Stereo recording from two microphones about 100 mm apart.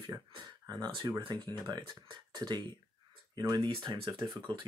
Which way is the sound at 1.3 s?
45° right (ahead or behind).